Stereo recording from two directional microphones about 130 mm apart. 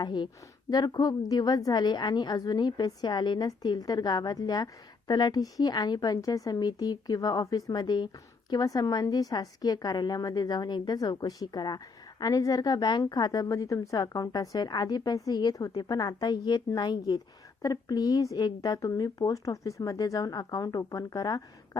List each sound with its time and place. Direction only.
0.0 s a woman's voice: 35° left (ahead or behind)